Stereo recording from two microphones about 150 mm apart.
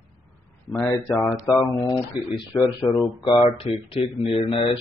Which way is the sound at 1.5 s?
15° left (ahead or behind).